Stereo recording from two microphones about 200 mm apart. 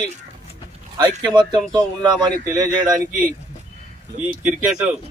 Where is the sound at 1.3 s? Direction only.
20° right (ahead or behind).